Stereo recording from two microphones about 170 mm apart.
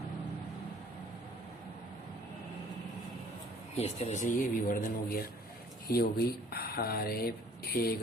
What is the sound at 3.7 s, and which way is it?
Speech, 40° left (ahead or behind).